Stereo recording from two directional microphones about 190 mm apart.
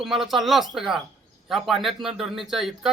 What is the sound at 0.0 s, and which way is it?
Speech, centre (ahead or behind).